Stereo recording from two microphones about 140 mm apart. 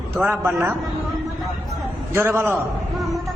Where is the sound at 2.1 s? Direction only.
15° right (ahead or behind).